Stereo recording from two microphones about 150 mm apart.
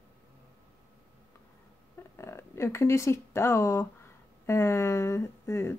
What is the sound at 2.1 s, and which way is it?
Speech, 20° left (ahead or behind).